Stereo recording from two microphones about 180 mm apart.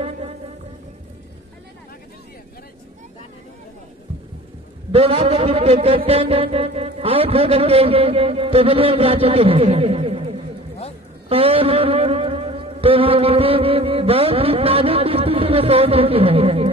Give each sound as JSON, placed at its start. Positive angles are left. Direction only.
{"t": 4.9, "sound": "music", "side_deg": -30}